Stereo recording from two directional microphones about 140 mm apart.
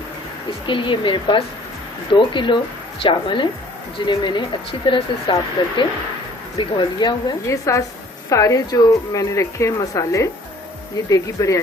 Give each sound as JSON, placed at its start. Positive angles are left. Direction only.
{"t": 0.7, "sound": "speech", "side_deg": 35}
{"t": 7.4, "sound": "speech", "side_deg": 20}